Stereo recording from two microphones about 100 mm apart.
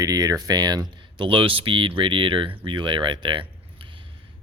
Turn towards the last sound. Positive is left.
turn(degrees=-55)  # may be behind; listen again after turning